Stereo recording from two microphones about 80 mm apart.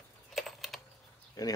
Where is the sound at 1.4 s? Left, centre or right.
Left.